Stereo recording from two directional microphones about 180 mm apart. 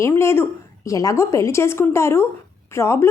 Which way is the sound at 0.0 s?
15° left (ahead or behind).